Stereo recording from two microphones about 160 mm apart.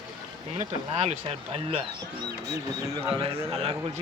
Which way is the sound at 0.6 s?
45° right (ahead or behind).